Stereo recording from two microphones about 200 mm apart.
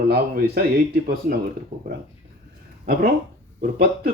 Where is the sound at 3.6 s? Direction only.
50° right (ahead or behind).